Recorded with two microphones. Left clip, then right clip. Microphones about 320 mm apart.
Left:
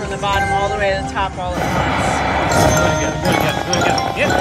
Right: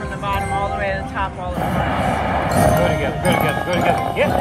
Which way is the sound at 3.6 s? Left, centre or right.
Centre.